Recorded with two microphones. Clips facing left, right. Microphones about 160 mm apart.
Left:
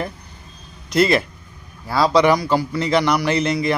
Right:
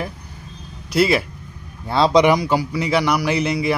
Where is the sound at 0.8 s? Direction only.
5° right (ahead or behind).